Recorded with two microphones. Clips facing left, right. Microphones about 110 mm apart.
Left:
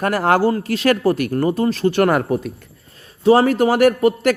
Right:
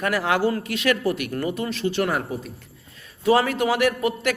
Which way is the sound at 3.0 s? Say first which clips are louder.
Left 6 dB; 30° left (ahead or behind).